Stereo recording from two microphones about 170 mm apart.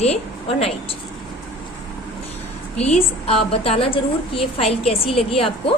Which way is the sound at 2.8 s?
35° left (ahead or behind).